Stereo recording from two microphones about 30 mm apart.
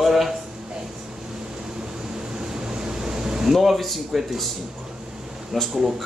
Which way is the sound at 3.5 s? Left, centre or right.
Centre.